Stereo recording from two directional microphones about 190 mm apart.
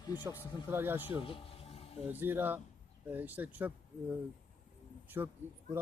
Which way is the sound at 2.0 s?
10° right (ahead or behind).